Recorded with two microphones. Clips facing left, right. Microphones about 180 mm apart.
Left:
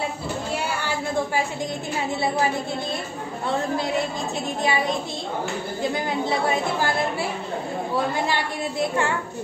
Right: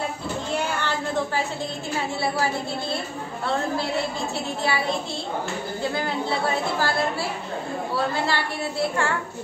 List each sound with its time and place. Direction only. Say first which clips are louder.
0.6 s a sound: right 1 dB; 10° left (ahead or behind)
4.6 s a woman's voice: left 2 dB; 20° left (ahead or behind)
8.3 s a woman's voice: left 1 dB; 15° left (ahead or behind)